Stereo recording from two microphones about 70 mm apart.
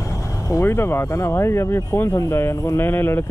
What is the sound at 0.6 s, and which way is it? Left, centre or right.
Speech, left.